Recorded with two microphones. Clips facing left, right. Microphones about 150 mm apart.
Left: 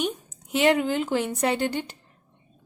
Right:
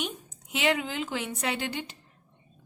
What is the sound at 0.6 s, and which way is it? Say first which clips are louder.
A woman's voice: left 7 dB; 50° left (ahead or behind).